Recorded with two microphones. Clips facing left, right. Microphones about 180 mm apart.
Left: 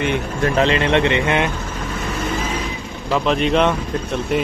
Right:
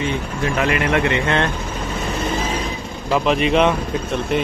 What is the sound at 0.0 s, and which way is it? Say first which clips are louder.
Speech: left 3 dB; 60° left (ahead or behind).